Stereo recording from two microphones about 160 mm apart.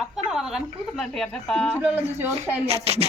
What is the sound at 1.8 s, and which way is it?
Speech, 10° right (ahead or behind).